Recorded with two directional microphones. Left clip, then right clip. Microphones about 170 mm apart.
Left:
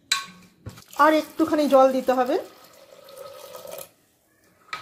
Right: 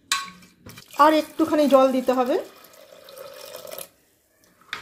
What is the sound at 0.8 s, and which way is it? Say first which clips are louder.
Speech: right 1 dB; 5° right (ahead or behind).